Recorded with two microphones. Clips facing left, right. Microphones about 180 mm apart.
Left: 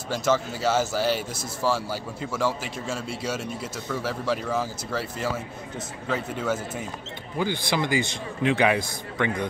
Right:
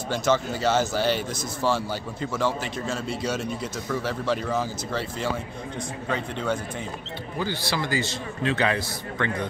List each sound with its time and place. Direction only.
0.1 s speech: 5° left (ahead or behind)
7.3 s a man's voice: 15° left (ahead or behind)